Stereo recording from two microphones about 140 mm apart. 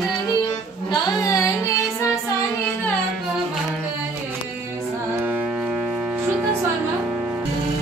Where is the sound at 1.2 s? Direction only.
25° left (ahead or behind).